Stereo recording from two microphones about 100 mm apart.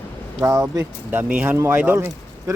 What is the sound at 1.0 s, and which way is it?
Speech, 15° right (ahead or behind).